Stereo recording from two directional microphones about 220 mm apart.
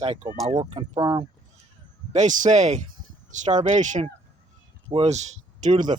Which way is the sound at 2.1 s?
35° right (ahead or behind).